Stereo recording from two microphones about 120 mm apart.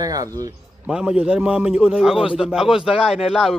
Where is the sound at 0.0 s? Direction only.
30° right (ahead or behind).